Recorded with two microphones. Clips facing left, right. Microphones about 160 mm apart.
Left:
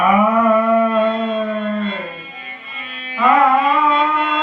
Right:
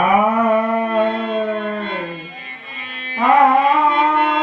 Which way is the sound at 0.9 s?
60° right (ahead or behind).